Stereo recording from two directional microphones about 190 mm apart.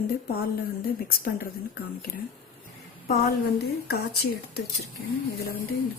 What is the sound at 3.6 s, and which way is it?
Speech, 60° left (ahead or behind).